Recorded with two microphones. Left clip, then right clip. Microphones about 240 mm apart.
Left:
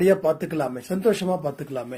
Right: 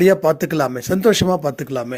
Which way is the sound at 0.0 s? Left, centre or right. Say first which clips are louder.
Right 5 dB; right.